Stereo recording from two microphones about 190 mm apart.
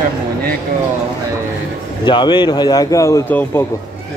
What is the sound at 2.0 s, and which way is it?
Speech, 25° left (ahead or behind).